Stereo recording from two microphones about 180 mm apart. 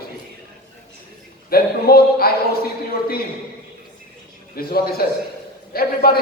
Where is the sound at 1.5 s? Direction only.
55° left (ahead or behind).